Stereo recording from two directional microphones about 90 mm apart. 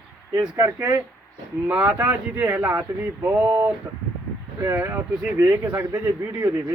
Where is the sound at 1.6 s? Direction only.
15° right (ahead or behind).